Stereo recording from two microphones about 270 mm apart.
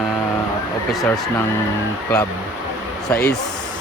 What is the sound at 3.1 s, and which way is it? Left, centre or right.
Speech, left.